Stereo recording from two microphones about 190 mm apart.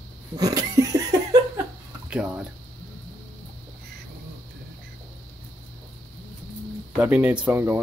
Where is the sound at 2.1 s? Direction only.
5° right (ahead or behind).